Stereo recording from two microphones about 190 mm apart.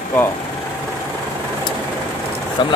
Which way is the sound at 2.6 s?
25° left (ahead or behind).